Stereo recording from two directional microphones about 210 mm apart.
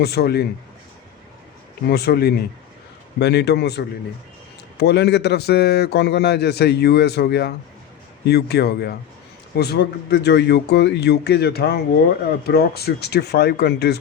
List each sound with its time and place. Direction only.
0.0 s a man's voice: 50° left (ahead or behind)
1.9 s a man's voice: 50° left (ahead or behind)